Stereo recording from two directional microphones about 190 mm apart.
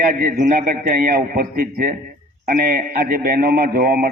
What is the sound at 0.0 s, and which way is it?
A man's voice, 45° right (ahead or behind).